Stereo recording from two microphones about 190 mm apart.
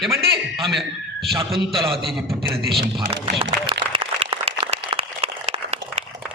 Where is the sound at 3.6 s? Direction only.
25° right (ahead or behind).